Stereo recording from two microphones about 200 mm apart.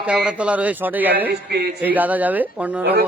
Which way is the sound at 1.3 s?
55° right (ahead or behind).